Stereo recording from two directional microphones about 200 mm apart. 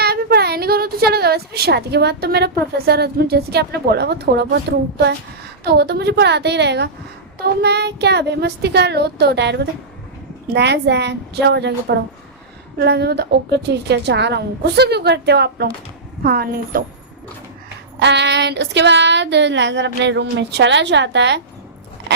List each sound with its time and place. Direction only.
0.0 s child singing: 50° right (ahead or behind)
2.7 s a woman's voice: 50° right (ahead or behind)
5.6 s child singing: 55° right (ahead or behind)
16.2 s a woman's voice: 50° right (ahead or behind)
18.0 s child singing: 60° right (ahead or behind)